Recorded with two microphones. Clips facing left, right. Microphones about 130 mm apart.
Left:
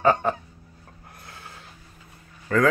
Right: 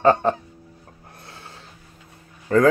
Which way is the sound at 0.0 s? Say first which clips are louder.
Right 4 dB; 30° right (ahead or behind).